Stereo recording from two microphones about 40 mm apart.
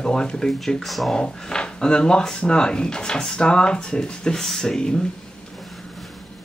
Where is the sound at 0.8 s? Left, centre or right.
Centre.